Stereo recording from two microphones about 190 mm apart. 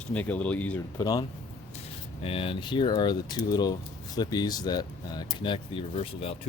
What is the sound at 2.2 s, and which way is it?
Speech, 30° left (ahead or behind).